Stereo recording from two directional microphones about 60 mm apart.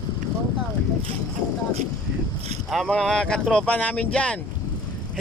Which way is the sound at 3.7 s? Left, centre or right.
Left.